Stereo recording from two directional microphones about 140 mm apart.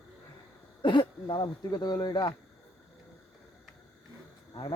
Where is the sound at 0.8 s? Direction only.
35° left (ahead or behind).